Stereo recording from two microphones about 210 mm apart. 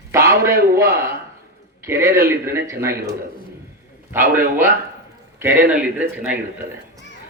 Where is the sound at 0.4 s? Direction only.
15° right (ahead or behind).